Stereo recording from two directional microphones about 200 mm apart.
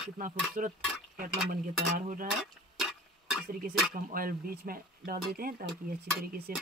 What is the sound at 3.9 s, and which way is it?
Cutlery, 45° right (ahead or behind).